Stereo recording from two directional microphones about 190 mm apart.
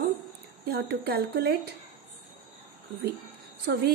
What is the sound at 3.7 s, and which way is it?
Speech, 50° right (ahead or behind).